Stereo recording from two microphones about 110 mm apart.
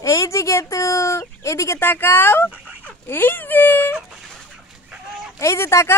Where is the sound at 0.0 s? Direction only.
30° left (ahead or behind).